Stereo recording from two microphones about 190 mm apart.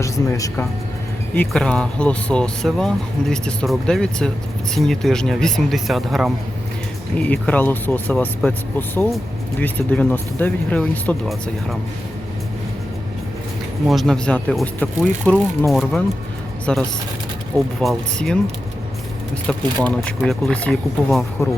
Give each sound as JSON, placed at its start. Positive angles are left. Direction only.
{"t": 0.0, "sound": "speech", "side_deg": 15}
{"t": 1.4, "sound": "speech", "side_deg": 5}
{"t": 9.6, "sound": "speech", "side_deg": 10}
{"t": 13.8, "sound": "speech", "side_deg": 0}
{"t": 19.5, "sound": "speech", "side_deg": 5}